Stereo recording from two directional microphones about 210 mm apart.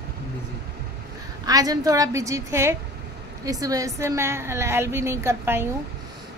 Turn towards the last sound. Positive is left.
turn(degrees=-10)  # may be behind; listen again after turning